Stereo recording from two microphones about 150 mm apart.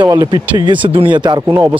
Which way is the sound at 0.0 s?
25° right (ahead or behind).